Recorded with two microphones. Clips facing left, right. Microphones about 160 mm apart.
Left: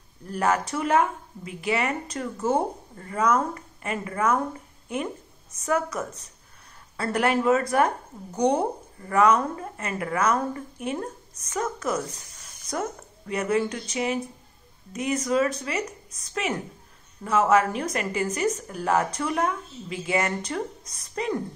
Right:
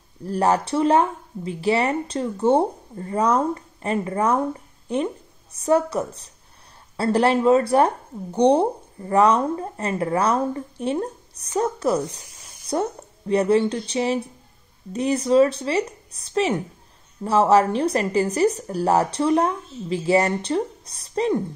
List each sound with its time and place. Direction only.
0.2 s speech: 35° right (ahead or behind)